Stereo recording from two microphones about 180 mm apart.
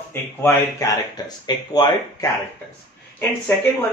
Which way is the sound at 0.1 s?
15° left (ahead or behind).